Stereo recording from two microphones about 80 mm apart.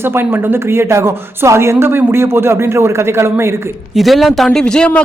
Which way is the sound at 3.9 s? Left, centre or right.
Centre.